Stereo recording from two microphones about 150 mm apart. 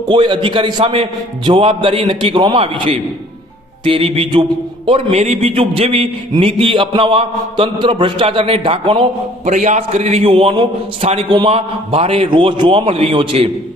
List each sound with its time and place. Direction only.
0.1 s a man's voice: 35° right (ahead or behind)
9.5 s a man's voice: 50° right (ahead or behind)